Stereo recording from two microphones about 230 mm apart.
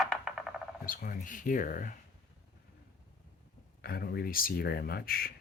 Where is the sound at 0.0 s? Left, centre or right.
Centre.